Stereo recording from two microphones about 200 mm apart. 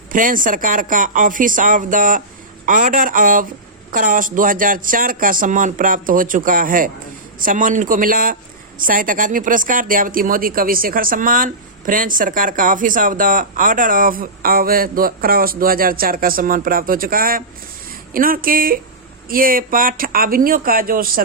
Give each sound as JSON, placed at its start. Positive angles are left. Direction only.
{"t": 0.1, "sound": "speech", "side_deg": -45}